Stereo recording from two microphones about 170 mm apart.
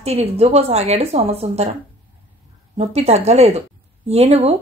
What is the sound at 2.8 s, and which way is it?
A woman's voice, 40° right (ahead or behind).